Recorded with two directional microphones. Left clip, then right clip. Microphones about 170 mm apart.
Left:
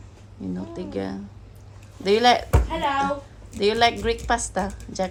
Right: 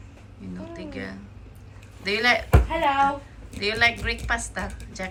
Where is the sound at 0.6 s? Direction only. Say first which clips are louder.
Left 4 dB; 25° left (ahead or behind).